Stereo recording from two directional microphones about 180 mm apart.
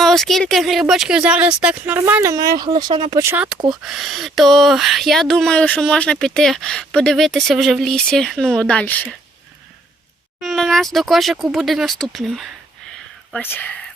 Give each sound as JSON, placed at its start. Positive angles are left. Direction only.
{"t": 0.0, "sound": "speech", "side_deg": 0}
{"t": 10.4, "sound": "speech", "side_deg": 0}